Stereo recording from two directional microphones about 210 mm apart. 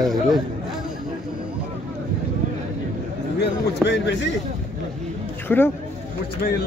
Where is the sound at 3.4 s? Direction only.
55° left (ahead or behind).